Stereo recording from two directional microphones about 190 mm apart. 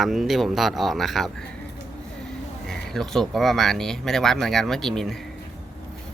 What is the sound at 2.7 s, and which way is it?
Speech, centre (ahead or behind).